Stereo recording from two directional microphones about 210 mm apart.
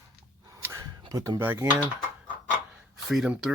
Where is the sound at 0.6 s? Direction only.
15° right (ahead or behind).